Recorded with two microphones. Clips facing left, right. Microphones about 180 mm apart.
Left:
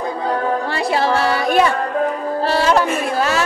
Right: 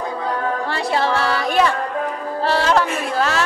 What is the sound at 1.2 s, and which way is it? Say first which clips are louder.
Child singing: left 2 dB; 15° left (ahead or behind).